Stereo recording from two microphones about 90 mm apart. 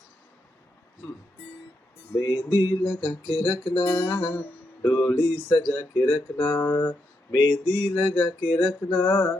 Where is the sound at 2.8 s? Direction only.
20° left (ahead or behind).